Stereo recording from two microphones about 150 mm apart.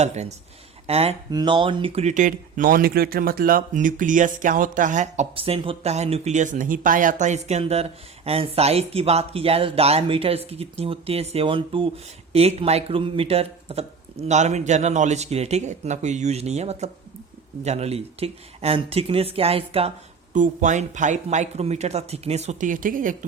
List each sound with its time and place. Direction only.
0.0 s speech: 50° right (ahead or behind)
1.3 s speech: 30° right (ahead or behind)
20.3 s speech: 55° right (ahead or behind)